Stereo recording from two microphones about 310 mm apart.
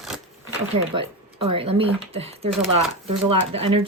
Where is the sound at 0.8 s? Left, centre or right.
Centre.